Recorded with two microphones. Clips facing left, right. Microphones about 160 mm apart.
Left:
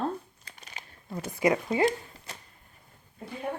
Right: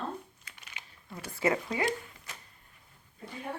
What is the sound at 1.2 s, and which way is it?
Speech, 15° left (ahead or behind).